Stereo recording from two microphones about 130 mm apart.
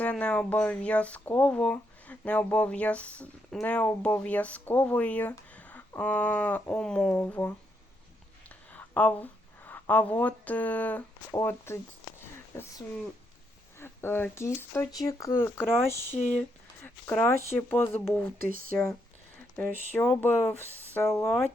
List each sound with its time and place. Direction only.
0.0 s speech: 10° left (ahead or behind)
8.4 s a sound: 10° left (ahead or behind)
11.3 s speech: 20° left (ahead or behind)
13.7 s speech: 15° left (ahead or behind)